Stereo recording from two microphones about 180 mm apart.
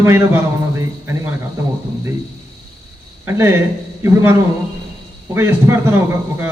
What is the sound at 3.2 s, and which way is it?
A man's voice, 15° right (ahead or behind).